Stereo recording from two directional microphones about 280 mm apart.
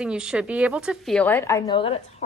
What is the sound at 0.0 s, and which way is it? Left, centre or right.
A woman's voice, centre.